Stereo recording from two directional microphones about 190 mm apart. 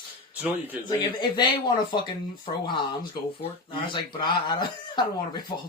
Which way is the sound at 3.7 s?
25° left (ahead or behind).